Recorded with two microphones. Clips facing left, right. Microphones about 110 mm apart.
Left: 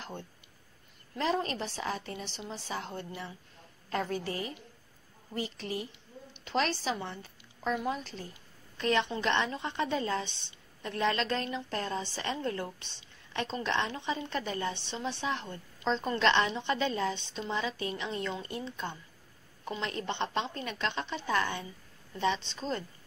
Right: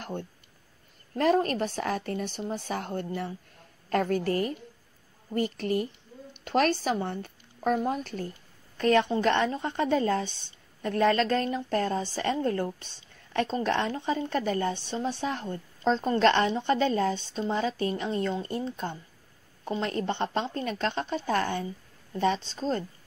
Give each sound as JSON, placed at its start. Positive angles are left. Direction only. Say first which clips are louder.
{"t": 1.1, "sound": "a woman's voice", "louder": "right 7 dB", "side_deg": -50}